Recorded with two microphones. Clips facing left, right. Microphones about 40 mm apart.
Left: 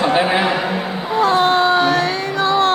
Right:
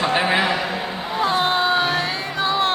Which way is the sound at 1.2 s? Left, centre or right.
Centre.